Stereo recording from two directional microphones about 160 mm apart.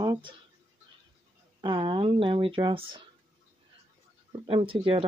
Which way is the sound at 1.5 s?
30° right (ahead or behind).